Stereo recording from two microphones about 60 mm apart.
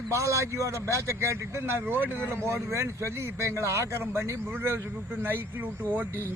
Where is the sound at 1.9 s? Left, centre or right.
Right.